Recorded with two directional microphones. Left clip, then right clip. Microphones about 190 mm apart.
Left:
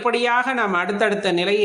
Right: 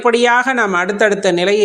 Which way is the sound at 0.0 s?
35° right (ahead or behind).